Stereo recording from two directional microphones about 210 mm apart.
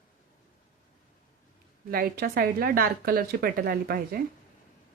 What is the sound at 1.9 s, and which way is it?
A woman's voice, 45° right (ahead or behind).